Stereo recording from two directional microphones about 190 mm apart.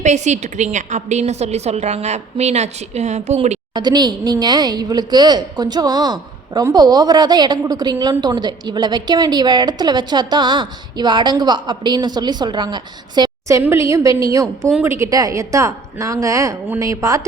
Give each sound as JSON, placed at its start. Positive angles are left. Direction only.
{"t": 0.0, "sound": "a woman's voice", "side_deg": -40}
{"t": 3.8, "sound": "a woman's voice", "side_deg": -20}